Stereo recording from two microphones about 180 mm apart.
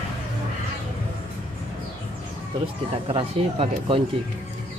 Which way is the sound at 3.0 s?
35° right (ahead or behind).